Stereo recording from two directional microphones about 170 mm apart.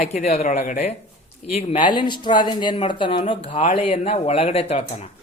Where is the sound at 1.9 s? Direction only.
25° left (ahead or behind).